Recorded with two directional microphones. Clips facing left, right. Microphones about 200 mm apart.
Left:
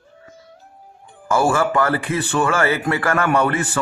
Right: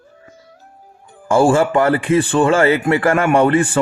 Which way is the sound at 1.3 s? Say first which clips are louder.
Right 5 dB; 30° right (ahead or behind).